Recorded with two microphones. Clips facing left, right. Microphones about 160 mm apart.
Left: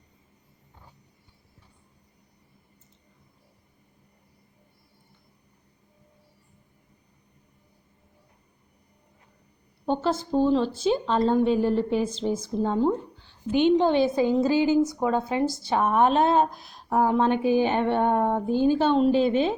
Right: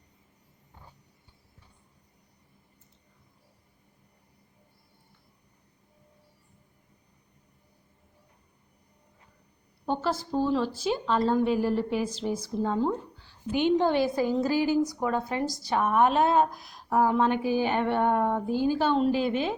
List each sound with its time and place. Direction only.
9.8 s speech: 25° left (ahead or behind)